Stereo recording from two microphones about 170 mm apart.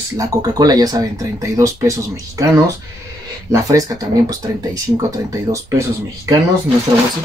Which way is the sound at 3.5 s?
20° right (ahead or behind).